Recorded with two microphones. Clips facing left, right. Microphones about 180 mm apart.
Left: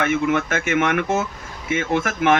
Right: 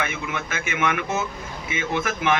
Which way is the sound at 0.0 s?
45° left (ahead or behind).